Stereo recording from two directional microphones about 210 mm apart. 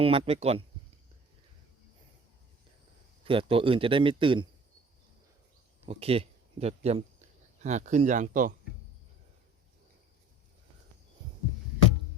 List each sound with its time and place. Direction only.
0.0 s speech: 25° right (ahead or behind)
3.2 s speech: 25° right (ahead or behind)
5.8 s speech: 30° right (ahead or behind)